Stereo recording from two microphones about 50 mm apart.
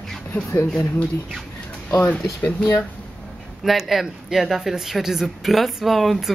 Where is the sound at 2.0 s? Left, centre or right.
Left.